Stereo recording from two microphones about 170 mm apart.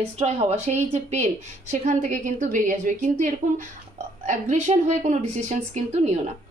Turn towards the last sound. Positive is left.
turn(degrees=-40)  # may be behind; listen again after turning